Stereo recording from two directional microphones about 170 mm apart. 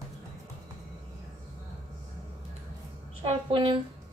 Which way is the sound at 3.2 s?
30° right (ahead or behind).